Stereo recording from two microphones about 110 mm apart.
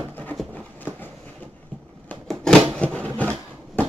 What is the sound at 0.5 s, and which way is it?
Train, 15° left (ahead or behind).